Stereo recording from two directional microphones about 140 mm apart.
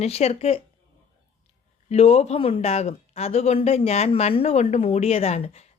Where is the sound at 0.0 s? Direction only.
50° left (ahead or behind).